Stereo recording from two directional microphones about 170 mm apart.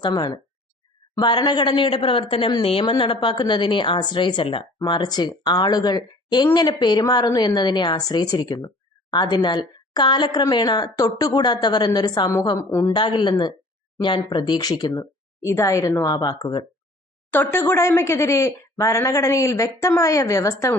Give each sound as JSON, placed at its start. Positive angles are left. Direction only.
{"t": 0.0, "sound": "speech", "side_deg": 25}
{"t": 17.3, "sound": "speech", "side_deg": 10}